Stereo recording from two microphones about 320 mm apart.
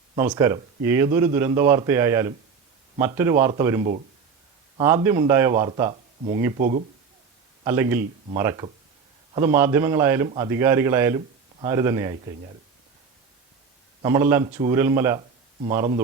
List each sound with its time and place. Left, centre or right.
0.2 s speech: centre
7.6 s speech: centre
14.0 s speech: centre